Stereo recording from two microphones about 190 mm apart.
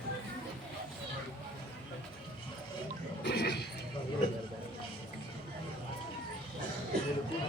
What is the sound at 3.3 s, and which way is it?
Neigh, 60° left (ahead or behind).